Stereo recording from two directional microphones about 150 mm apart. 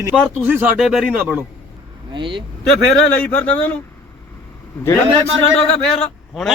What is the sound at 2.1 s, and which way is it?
Speech, 30° right (ahead or behind).